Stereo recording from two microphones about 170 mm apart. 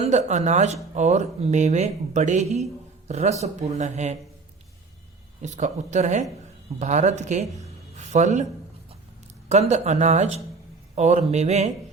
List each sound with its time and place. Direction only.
0.0 s speech: 45° right (ahead or behind)
5.4 s speech: 45° right (ahead or behind)
9.5 s speech: 40° right (ahead or behind)